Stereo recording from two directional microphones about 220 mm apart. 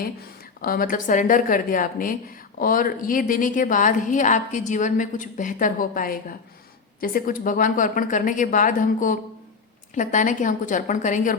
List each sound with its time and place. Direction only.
0.6 s a woman's voice: 40° left (ahead or behind)